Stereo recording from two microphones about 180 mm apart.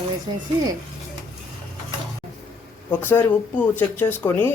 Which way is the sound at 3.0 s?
10° left (ahead or behind).